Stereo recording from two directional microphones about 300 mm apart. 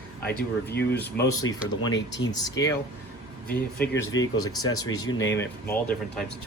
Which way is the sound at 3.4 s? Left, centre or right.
Left.